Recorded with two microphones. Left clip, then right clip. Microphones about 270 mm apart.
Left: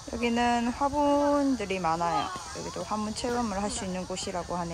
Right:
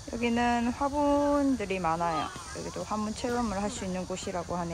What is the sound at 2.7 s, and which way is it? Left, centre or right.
Speech, centre.